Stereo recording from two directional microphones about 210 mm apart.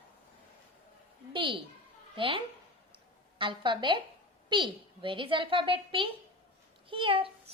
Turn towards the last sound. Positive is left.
turn(degrees=-25)  # may be behind; listen again after turning